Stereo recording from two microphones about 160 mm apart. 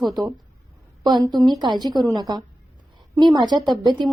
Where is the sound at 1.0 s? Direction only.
25° right (ahead or behind).